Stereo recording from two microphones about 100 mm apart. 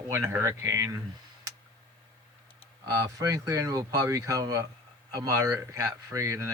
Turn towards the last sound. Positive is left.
turn(degrees=-30)  # may be behind; listen again after turning